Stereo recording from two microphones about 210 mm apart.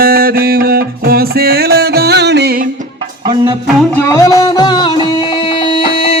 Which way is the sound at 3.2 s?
20° right (ahead or behind).